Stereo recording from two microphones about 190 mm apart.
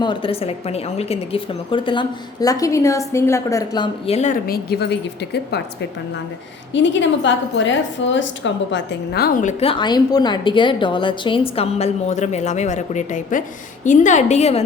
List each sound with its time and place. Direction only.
0.0 s a woman's voice: 25° left (ahead or behind)
4.0 s a woman's voice: 35° left (ahead or behind); by 5.5 s 60° left (ahead or behind)
6.7 s a woman's voice: 75° left (ahead or behind); by 14.6 s 35° left (ahead or behind)